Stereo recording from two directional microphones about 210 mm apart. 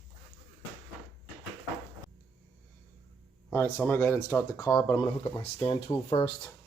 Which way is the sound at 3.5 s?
10° left (ahead or behind).